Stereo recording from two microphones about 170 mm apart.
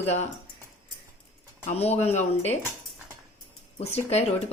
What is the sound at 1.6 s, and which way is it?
Speech, 35° left (ahead or behind).